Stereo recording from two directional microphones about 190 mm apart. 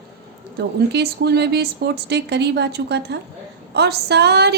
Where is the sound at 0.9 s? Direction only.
60° right (ahead or behind).